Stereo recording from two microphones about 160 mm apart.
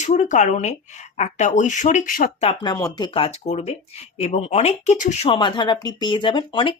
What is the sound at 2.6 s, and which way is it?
Speech, 25° left (ahead or behind).